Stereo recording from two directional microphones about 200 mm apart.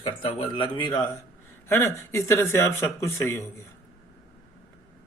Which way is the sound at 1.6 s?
15° left (ahead or behind).